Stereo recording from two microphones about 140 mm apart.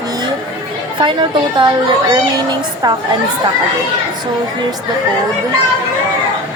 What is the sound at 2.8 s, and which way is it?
Speech, 30° right (ahead or behind).